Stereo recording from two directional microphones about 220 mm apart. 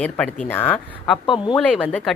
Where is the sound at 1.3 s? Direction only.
20° left (ahead or behind).